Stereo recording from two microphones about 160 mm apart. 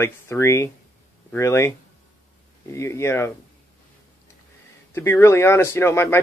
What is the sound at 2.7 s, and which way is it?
Speech, 15° left (ahead or behind).